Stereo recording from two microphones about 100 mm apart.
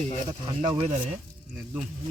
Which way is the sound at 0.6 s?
90° right.